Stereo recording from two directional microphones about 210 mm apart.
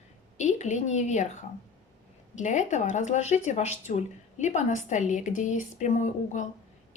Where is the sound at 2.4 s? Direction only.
35° left (ahead or behind).